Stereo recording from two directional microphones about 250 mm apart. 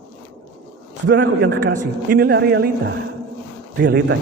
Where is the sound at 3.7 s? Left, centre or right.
Right.